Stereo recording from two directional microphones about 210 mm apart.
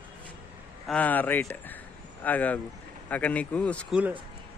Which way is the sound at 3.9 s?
5° right (ahead or behind).